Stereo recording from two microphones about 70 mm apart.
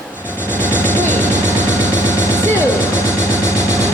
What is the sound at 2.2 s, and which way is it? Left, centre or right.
Music, left.